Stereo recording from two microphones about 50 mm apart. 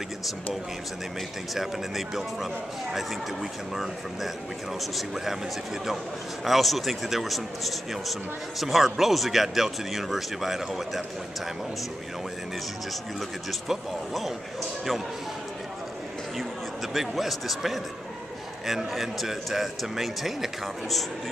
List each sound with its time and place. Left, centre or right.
1.5 s a man's voice: centre
6.4 s a man's voice: centre
13.5 s a man's voice: centre
16.9 s a man's voice: centre